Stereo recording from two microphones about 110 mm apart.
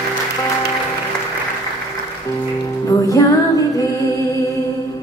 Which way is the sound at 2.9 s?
30° left (ahead or behind).